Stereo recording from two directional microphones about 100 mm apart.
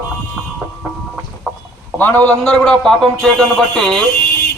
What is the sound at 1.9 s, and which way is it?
A man's voice, 20° left (ahead or behind).